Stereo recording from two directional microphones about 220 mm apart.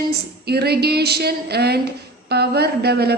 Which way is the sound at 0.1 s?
45° right (ahead or behind).